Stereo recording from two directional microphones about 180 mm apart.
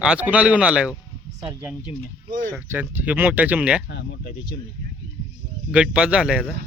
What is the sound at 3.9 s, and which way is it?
Speech, 65° left (ahead or behind).